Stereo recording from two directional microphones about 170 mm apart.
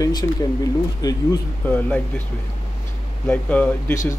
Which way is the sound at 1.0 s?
25° left (ahead or behind).